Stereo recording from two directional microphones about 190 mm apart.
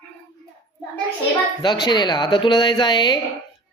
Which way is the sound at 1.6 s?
25° left (ahead or behind).